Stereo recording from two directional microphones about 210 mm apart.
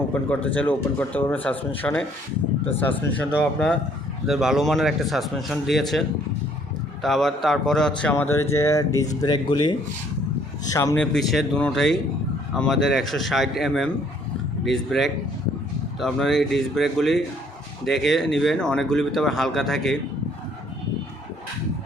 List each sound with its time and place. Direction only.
0.1 s speech: 5° left (ahead or behind)